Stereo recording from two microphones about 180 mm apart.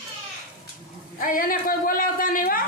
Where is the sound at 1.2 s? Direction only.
50° left (ahead or behind).